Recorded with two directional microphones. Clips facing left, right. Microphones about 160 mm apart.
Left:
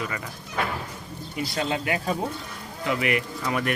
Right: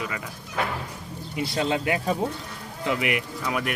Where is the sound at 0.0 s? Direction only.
5° right (ahead or behind).